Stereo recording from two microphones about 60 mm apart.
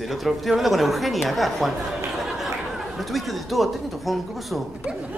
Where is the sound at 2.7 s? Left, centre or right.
Centre.